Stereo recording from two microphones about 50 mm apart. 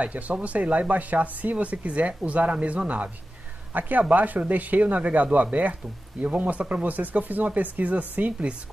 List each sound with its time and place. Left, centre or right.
0.0 s speech: right
8.2 s speech: right